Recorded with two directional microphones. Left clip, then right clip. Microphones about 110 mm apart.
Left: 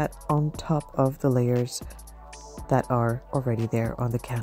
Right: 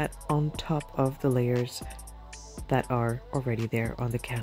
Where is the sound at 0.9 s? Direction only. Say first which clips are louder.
Left 3 dB; 35° left (ahead or behind).